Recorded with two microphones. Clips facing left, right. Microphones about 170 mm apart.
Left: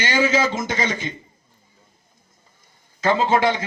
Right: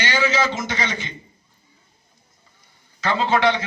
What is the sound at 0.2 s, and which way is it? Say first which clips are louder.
Speech: left 4 dB; 45° left (ahead or behind).